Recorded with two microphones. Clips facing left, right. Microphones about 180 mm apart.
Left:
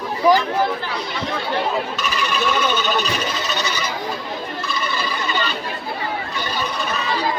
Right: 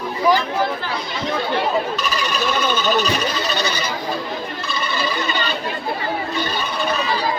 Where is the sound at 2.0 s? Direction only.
35° right (ahead or behind).